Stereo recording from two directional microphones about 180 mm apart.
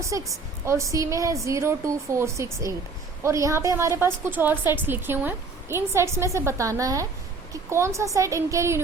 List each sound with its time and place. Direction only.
0.0 s a woman's voice: 15° right (ahead or behind)